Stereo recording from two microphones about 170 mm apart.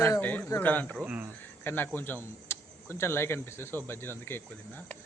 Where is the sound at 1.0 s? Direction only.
10° right (ahead or behind).